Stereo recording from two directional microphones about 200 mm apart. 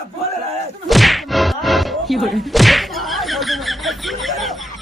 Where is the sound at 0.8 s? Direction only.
Centre (ahead or behind).